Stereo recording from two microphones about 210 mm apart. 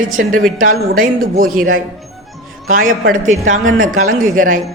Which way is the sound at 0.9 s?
40° right (ahead or behind).